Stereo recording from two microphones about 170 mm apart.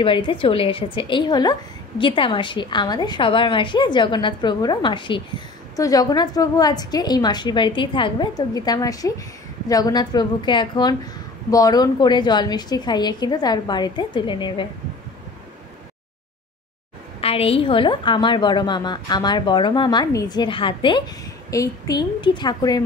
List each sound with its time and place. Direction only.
0.0 s a woman's voice: 30° left (ahead or behind)
17.2 s a woman's voice: 35° left (ahead or behind)